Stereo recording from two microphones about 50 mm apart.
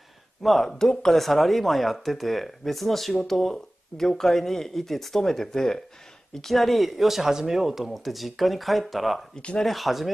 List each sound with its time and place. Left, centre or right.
0.4 s speech: centre
9.3 s speech: centre
9.7 s speech: centre